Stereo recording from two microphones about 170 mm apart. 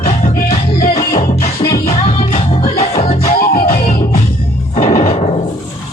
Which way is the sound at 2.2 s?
40° left (ahead or behind).